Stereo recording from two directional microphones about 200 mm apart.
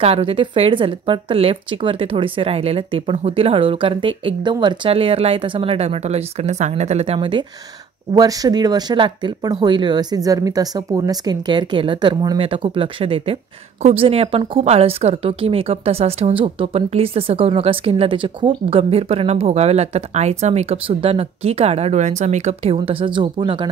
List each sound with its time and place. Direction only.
0.0 s speech: 30° right (ahead or behind)